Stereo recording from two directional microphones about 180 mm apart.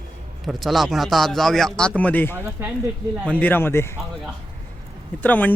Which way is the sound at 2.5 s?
5° right (ahead or behind).